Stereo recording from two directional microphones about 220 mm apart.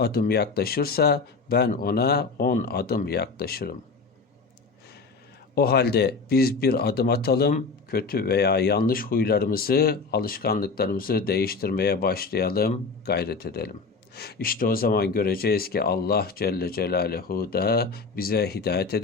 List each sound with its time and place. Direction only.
0.0 s speech: 45° left (ahead or behind)
5.5 s speech: 45° left (ahead or behind)